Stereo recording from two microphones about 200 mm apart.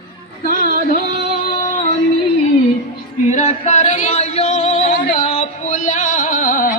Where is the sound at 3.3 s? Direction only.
35° left (ahead or behind).